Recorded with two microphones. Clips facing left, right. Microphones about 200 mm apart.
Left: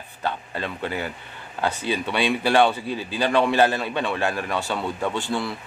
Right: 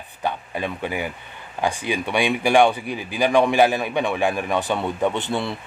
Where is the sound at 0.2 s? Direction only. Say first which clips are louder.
Right 2 dB; 15° right (ahead or behind).